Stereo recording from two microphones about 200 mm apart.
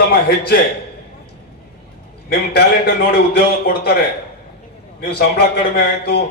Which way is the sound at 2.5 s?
55° left (ahead or behind).